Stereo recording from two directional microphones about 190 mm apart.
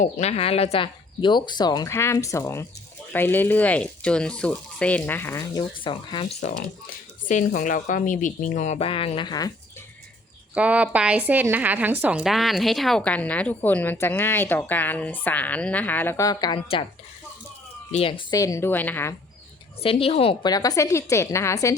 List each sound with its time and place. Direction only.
0.0 s a woman's voice: 35° left (ahead or behind)
7.3 s speech: 40° left (ahead or behind); by 9.5 s 20° left (ahead or behind)
10.5 s a woman's voice: 5° right (ahead or behind); by 16.6 s 20° left (ahead or behind)
18.3 s a woman's voice: 15° left (ahead or behind)
19.8 s a woman's voice: 30° left (ahead or behind)